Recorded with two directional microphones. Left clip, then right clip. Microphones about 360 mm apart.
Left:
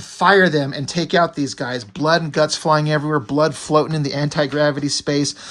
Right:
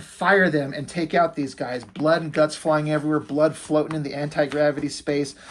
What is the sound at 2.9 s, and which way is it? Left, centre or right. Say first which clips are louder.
Speech: left 4 dB; left.